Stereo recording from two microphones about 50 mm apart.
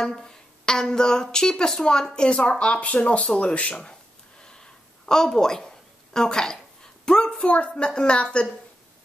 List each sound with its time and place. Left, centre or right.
0.0 s a woman's voice: centre